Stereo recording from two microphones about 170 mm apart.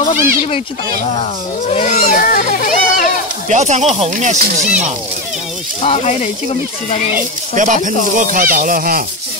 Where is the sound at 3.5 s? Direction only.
45° right (ahead or behind).